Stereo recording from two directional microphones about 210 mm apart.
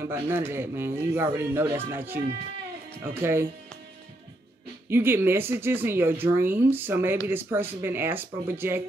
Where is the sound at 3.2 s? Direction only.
10° right (ahead or behind).